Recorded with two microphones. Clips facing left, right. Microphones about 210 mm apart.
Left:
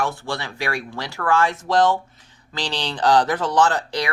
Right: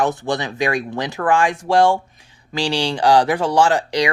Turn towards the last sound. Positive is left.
turn(degrees=-15)  # may be behind; listen again after turning